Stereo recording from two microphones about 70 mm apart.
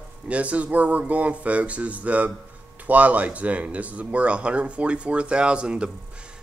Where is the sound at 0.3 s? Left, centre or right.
Centre.